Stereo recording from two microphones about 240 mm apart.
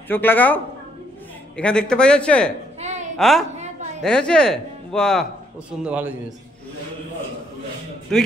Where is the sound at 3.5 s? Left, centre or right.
Right.